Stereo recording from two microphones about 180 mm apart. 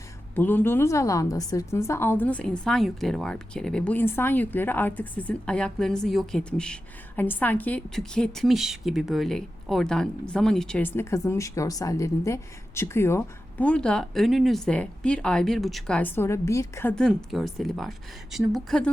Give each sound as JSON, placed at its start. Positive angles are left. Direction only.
{"t": 0.3, "sound": "a woman's voice", "side_deg": 10}
{"t": 16.9, "sound": "a woman's voice", "side_deg": 5}